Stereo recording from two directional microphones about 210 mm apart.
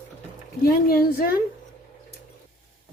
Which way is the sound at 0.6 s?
45° left (ahead or behind).